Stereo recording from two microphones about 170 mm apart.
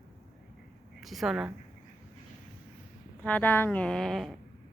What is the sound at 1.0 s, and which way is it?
Speech, centre (ahead or behind).